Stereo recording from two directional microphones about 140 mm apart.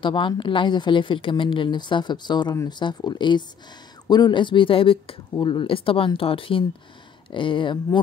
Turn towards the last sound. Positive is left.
turn(degrees=35)  # may be behind; listen again after turning